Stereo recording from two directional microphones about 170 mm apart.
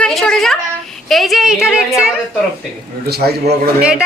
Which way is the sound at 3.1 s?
70° right (ahead or behind).